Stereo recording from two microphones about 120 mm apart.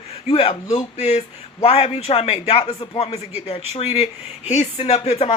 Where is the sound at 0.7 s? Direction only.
70° left (ahead or behind).